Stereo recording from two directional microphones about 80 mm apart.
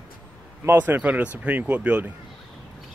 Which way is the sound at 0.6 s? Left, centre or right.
Right.